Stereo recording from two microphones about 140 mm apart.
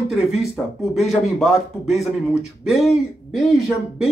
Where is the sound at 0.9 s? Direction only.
Centre (ahead or behind).